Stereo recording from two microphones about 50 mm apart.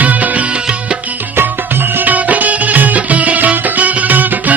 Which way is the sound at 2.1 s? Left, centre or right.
Right.